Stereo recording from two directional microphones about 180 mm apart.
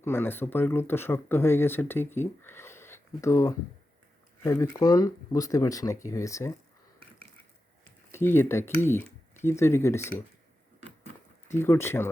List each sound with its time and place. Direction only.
0.0 s speech: 15° left (ahead or behind)
8.1 s speech: 15° left (ahead or behind)
11.5 s speech: 15° left (ahead or behind)